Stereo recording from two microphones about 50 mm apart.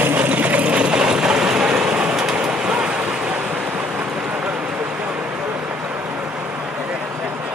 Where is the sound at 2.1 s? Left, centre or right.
Centre.